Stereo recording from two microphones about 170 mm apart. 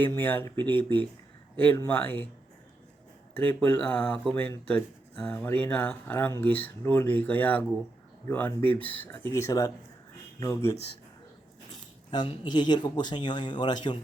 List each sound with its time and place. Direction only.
0.0 s speech: 10° left (ahead or behind)
1.5 s speech: 10° left (ahead or behind)
3.3 s speech: 10° left (ahead or behind)